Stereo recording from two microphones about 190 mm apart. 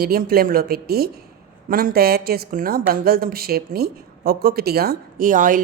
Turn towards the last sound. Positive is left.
turn(degrees=-45)  # may be behind; listen again after turning